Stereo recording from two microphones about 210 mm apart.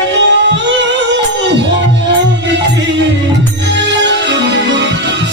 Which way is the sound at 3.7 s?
55° right (ahead or behind).